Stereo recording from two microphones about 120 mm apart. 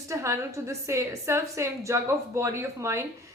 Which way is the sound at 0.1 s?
25° right (ahead or behind).